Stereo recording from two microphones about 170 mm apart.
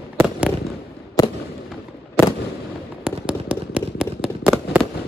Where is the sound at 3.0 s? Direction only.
5° right (ahead or behind).